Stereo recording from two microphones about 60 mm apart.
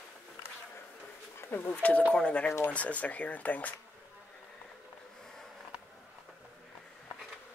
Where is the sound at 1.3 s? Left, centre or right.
Left.